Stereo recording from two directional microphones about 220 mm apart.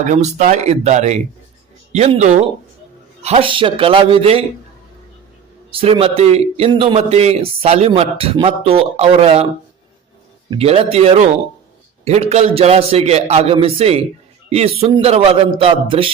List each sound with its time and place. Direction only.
0.0 s a man's voice: 35° right (ahead or behind)
5.7 s a man's voice: 25° right (ahead or behind)
10.5 s a man's voice: 25° right (ahead or behind)